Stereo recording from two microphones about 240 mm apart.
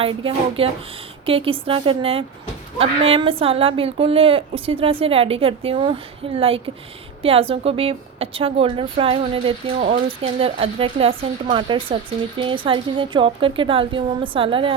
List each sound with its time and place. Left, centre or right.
0.0 s a woman's voice: right